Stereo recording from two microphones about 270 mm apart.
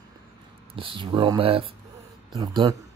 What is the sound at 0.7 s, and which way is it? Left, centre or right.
Speech, centre.